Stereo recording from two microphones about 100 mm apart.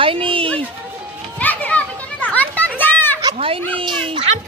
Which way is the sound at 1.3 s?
15° left (ahead or behind).